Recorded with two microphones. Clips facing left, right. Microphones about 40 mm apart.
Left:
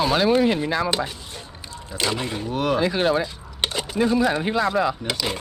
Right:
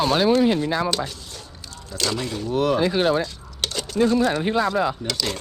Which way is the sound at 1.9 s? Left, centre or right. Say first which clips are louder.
Left 1 dB; left.